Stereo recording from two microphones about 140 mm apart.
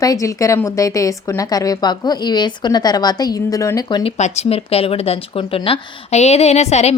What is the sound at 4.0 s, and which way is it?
Speech, 45° left (ahead or behind).